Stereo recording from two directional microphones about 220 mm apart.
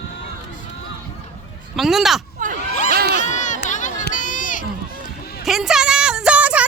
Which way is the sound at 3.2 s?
35° left (ahead or behind).